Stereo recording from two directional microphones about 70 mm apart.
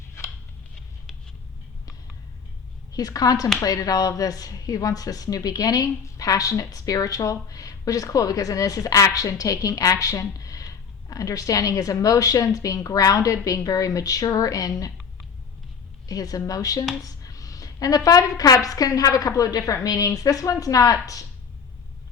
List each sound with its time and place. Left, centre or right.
0.2 s a sound: left
2.9 s speech: left
16.0 s speech: left